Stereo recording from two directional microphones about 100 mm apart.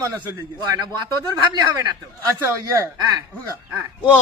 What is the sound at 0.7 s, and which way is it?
A man's voice, 45° right (ahead or behind).